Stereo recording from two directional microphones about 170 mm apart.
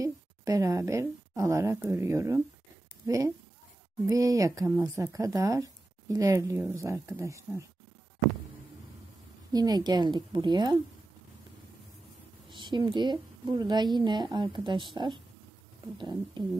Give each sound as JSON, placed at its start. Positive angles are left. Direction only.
{"t": 0.0, "sound": "a woman's voice", "side_deg": -20}
{"t": 9.5, "sound": "a woman's voice", "side_deg": -25}
{"t": 12.4, "sound": "a woman's voice", "side_deg": -25}